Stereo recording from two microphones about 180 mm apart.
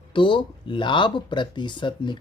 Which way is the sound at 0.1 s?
25° left (ahead or behind).